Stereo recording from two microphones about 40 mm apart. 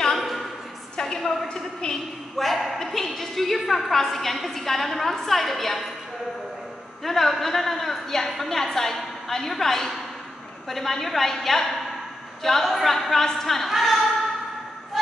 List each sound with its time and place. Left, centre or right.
0.9 s a sound: centre
2.3 s a woman's voice: centre
7.0 s a woman's voice: centre
12.9 s a woman's voice: centre
13.7 s speech: centre